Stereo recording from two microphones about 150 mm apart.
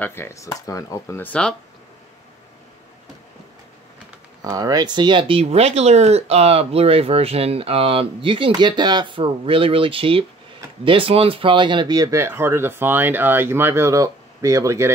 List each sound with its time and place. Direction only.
0.0 s speech: 15° left (ahead or behind)
4.4 s speech: 25° right (ahead or behind)